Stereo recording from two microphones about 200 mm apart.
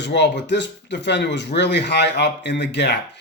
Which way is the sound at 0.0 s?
60° left (ahead or behind).